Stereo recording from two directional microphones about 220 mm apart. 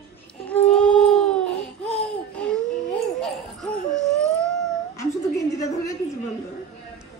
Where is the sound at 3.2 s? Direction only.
Centre (ahead or behind).